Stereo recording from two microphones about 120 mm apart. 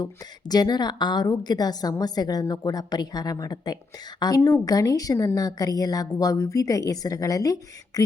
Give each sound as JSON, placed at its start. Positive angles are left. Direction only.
{"t": 0.0, "sound": "a woman's voice", "side_deg": 35}